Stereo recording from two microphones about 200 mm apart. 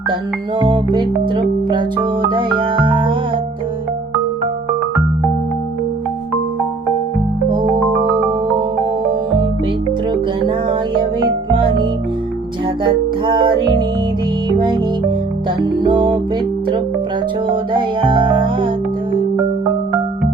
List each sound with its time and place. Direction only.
0.6 s music: 25° right (ahead or behind)
10.1 s music: 20° right (ahead or behind)
15.6 s music: 25° right (ahead or behind)
17.5 s music: 25° right (ahead or behind)